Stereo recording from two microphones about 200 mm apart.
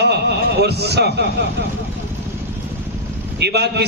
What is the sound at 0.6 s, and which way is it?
Speech, 55° right (ahead or behind).